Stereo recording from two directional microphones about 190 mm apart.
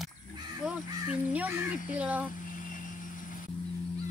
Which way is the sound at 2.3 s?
45° left (ahead or behind).